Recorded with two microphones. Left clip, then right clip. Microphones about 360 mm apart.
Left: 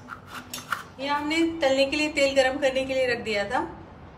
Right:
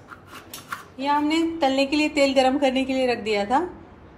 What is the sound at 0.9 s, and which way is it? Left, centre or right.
A woman's voice, centre.